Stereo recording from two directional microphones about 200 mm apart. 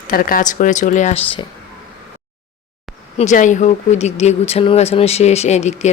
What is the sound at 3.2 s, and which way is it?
Speech, 35° left (ahead or behind).